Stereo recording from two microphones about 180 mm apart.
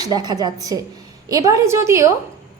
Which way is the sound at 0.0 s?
20° right (ahead or behind).